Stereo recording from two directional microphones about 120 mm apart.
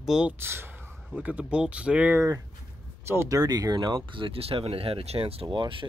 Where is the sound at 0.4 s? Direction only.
20° right (ahead or behind).